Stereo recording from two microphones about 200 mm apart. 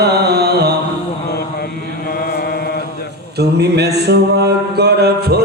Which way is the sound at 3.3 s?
55° right (ahead or behind).